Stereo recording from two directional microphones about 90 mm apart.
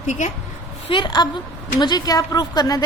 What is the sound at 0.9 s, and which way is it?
Speech, 70° left (ahead or behind).